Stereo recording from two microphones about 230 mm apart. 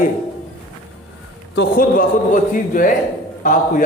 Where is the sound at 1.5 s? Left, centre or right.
Left.